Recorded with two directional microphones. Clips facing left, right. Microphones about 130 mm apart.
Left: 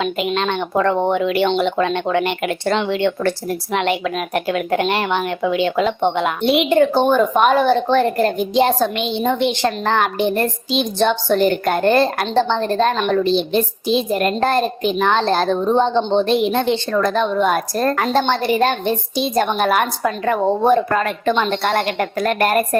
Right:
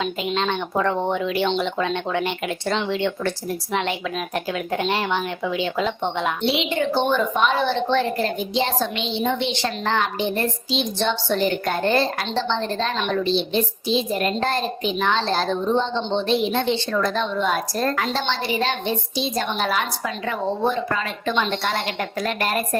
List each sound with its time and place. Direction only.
0.0 s speech: 65° left (ahead or behind)